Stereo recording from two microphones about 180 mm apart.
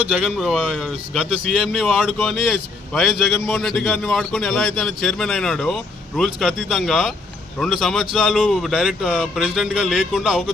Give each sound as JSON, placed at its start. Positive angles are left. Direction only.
{"t": 0.1, "sound": "a man's voice", "side_deg": 0}